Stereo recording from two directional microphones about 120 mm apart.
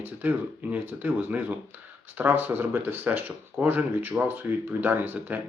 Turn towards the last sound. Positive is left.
turn(degrees=-15)  # may be behind; listen again after turning